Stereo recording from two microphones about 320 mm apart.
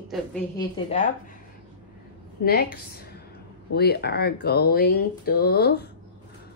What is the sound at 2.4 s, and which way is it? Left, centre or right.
Speech, left.